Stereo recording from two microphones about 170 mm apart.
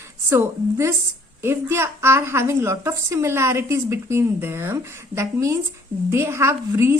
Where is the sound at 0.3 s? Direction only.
15° right (ahead or behind).